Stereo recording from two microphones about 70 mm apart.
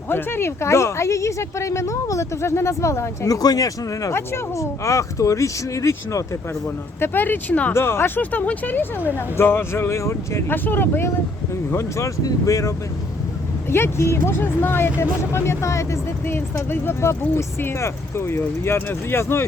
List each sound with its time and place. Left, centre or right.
0.1 s speech: left
4.1 s speech: left
7.0 s speech: left
7.7 s speech: left
10.5 s speech: left
11.7 s speech: left
12.2 s speech: left
13.7 s speech: left